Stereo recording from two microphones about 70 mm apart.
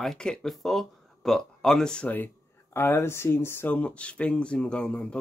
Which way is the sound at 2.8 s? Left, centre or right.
Left.